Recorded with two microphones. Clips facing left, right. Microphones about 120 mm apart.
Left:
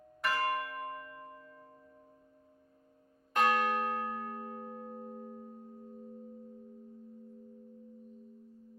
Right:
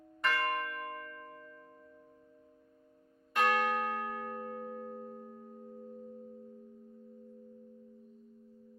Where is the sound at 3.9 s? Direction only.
25° left (ahead or behind).